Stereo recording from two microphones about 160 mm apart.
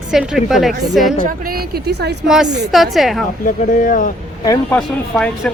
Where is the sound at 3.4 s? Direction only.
55° left (ahead or behind).